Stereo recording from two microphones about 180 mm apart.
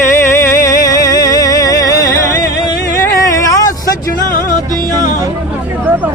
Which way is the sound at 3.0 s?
20° left (ahead or behind).